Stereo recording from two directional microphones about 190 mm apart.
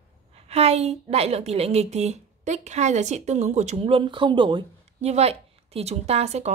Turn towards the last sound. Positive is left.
turn(degrees=-35)  # may be behind; listen again after turning